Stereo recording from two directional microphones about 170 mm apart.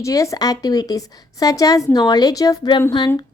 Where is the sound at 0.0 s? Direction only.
20° left (ahead or behind).